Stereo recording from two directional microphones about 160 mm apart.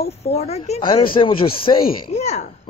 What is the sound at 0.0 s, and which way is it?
A woman's voice, 40° left (ahead or behind).